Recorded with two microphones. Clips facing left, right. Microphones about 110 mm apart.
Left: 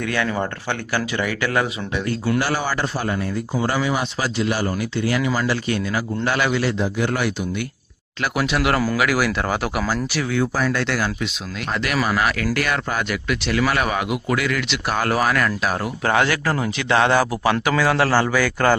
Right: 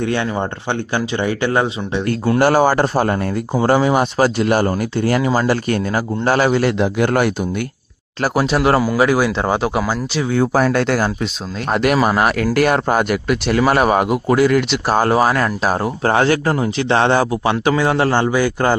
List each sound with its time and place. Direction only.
0.0 s speech: 25° right (ahead or behind)
2.4 s speech: 45° right (ahead or behind)
6.7 s speech: 65° right (ahead or behind)
8.2 s speech: 35° right (ahead or behind); by 10.3 s 20° right (ahead or behind)
10.3 s speech: 50° right (ahead or behind); by 18.8 s 20° right (ahead or behind)